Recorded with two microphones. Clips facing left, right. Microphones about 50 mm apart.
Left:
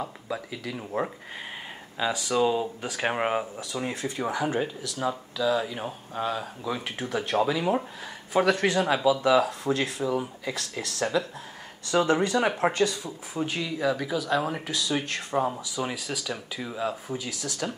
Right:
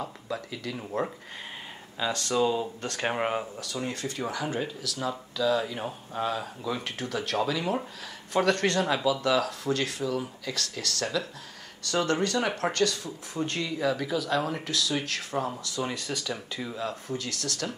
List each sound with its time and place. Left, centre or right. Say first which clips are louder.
0.0 s speech: left 1 dB; centre
5.5 s speech: left 1 dB; centre